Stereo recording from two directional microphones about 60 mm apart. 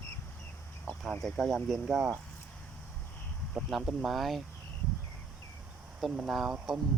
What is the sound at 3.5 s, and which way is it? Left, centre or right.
Speech, centre.